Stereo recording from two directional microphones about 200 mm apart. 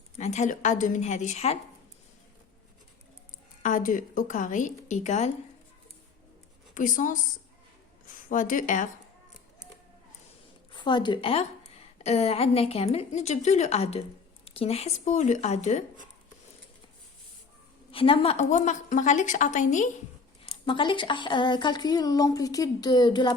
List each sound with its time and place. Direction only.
0.2 s a woman's voice: 35° left (ahead or behind)
3.6 s a woman's voice: 40° left (ahead or behind)
6.7 s a woman's voice: 40° left (ahead or behind)
10.7 s a woman's voice: 25° left (ahead or behind)
17.9 s a woman's voice: 25° left (ahead or behind)
20.7 s a woman's voice: 25° left (ahead or behind)